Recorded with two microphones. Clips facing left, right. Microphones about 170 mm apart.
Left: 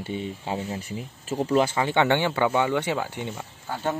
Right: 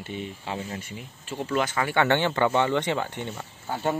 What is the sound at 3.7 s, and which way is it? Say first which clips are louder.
Speech: right 1 dB; 15° right (ahead or behind).